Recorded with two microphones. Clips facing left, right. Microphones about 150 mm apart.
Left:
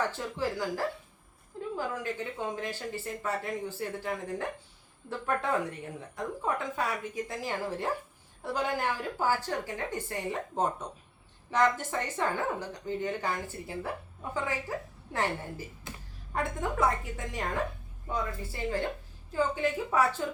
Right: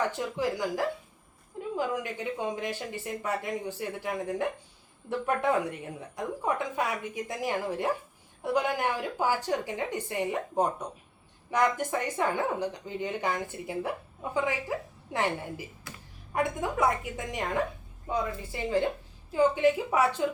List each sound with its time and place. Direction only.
0.1 s speech: 15° right (ahead or behind)
15.1 s speech: 15° right (ahead or behind)
15.9 s a sound: 20° left (ahead or behind)
16.3 s speech: 15° right (ahead or behind)